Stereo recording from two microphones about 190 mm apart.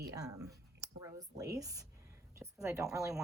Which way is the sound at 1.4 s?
15° right (ahead or behind).